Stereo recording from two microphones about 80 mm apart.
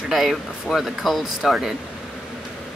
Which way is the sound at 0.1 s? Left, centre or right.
Centre.